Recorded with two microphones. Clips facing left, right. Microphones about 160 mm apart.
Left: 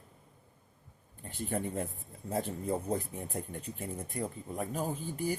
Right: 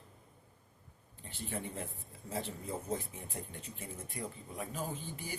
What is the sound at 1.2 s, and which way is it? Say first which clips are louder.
Speech: left 6 dB; 45° left (ahead or behind).